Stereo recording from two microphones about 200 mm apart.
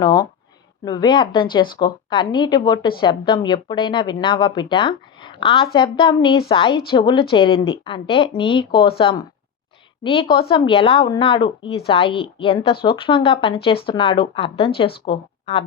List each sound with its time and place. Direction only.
0.0 s speech: 20° left (ahead or behind)